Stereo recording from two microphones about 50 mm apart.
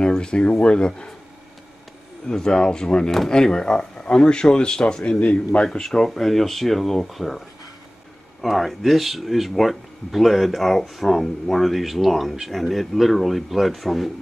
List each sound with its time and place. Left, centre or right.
0.0 s speech: centre
2.2 s speech: centre
3.1 s speech: centre
3.3 s speech: centre
5.7 s speech: centre